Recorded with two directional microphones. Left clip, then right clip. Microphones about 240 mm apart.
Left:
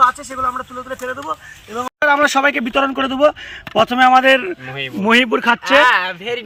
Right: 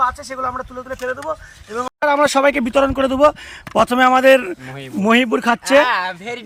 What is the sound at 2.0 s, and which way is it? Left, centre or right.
Speech, centre.